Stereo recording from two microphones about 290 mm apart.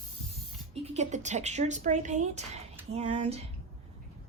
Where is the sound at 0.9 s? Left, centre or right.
Right.